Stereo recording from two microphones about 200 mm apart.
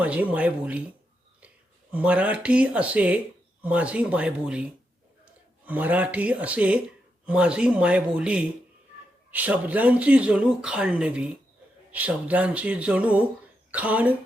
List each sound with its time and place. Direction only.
0.0 s speech: 5° right (ahead or behind)
1.9 s speech: 5° right (ahead or behind)